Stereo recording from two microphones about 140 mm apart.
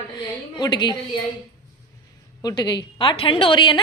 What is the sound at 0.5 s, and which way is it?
Speech, 30° left (ahead or behind).